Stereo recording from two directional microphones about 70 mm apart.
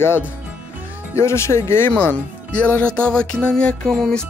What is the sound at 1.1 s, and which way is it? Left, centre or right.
Speech, left.